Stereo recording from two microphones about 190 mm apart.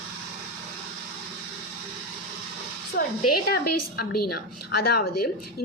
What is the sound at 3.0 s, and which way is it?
A woman's voice, 55° left (ahead or behind).